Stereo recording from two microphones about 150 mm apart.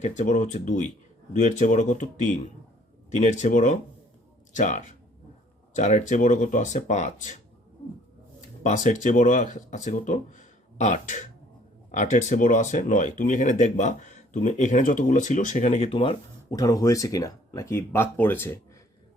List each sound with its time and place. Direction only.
0.0 s speech: 50° left (ahead or behind)
8.6 s speech: 60° left (ahead or behind); by 16.1 s 40° left (ahead or behind)
16.5 s speech: 25° left (ahead or behind)